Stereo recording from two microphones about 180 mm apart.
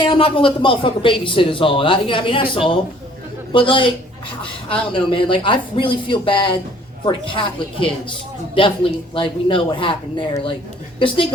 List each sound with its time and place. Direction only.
0.0 s a man's voice: 30° left (ahead or behind)
5.1 s a man's voice: 30° left (ahead or behind)